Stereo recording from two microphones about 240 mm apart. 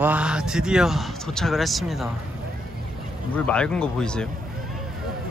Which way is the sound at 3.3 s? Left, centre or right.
Centre.